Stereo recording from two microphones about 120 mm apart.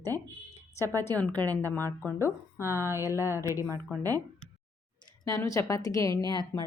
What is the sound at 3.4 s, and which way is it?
Speech, 25° left (ahead or behind).